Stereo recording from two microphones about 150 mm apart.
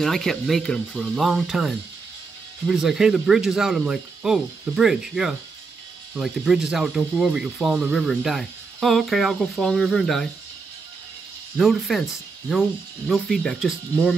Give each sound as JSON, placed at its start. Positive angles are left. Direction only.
{"t": 0.0, "sound": "speech", "side_deg": 0}
{"t": 11.5, "sound": "speech", "side_deg": 0}